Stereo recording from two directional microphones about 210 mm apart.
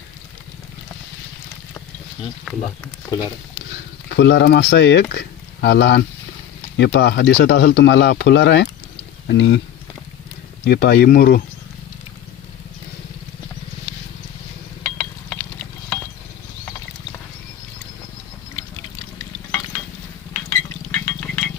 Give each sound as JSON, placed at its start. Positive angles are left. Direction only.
{"t": 2.4, "sound": "speech", "side_deg": 5}
{"t": 3.1, "sound": "speech", "side_deg": 20}
{"t": 4.1, "sound": "speech", "side_deg": 55}
{"t": 10.7, "sound": "speech", "side_deg": 50}
{"t": 14.8, "sound": "a sound", "side_deg": 5}
{"t": 20.5, "sound": "a sound", "side_deg": 10}